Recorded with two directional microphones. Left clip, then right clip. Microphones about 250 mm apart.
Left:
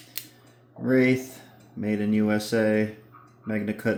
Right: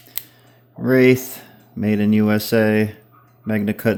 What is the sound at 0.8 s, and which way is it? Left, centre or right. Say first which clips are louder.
Speech: right 8 dB; right.